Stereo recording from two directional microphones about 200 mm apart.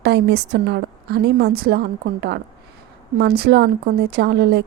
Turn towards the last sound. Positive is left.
turn(degrees=-55)  # may be behind; listen again after turning